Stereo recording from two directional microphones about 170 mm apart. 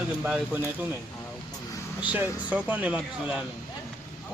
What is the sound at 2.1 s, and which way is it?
Speech, 10° right (ahead or behind).